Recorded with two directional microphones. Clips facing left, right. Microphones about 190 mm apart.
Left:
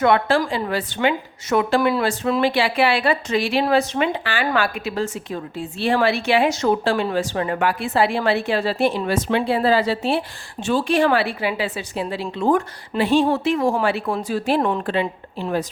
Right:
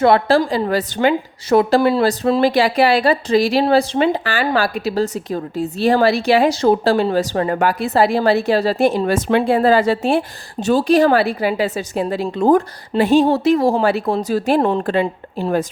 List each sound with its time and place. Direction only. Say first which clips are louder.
0.0 s a woman's voice: right 4 dB; 35° right (ahead or behind)